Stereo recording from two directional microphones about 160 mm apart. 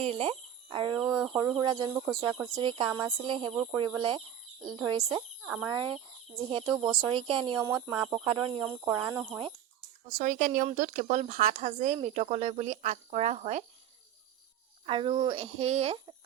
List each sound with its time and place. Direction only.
0.0 s speech: 35° right (ahead or behind)
7.5 s speech: 20° right (ahead or behind)
10.1 s speech: 50° right (ahead or behind)
14.8 s speech: 35° right (ahead or behind)